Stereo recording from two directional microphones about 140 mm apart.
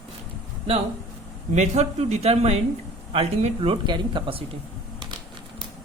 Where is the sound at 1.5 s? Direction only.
55° right (ahead or behind); by 4.4 s 40° right (ahead or behind).